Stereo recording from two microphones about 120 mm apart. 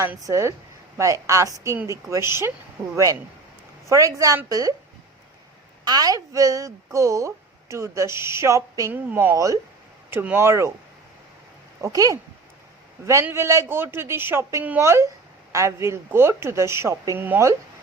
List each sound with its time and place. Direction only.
0.2 s a woman's voice: 25° right (ahead or behind)
5.8 s a woman's voice: 35° right (ahead or behind)
8.9 s a woman's voice: 15° right (ahead or behind)
11.8 s a woman's voice: 30° right (ahead or behind)
13.2 s a woman's voice: 20° right (ahead or behind)